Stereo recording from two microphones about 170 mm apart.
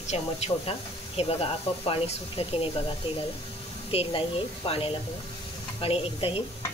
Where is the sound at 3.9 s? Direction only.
35° left (ahead or behind).